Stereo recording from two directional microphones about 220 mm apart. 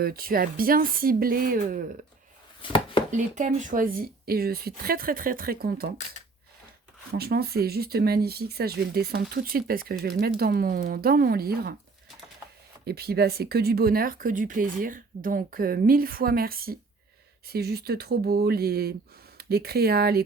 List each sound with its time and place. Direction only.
0.0 s speech: 40° right (ahead or behind)
2.6 s chopping: 20° left (ahead or behind)
3.1 s speech: 35° right (ahead or behind)
7.1 s speech: 45° right (ahead or behind)
12.8 s speech: 45° right (ahead or behind)